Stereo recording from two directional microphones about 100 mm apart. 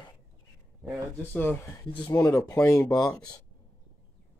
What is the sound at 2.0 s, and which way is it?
Speech, 35° left (ahead or behind).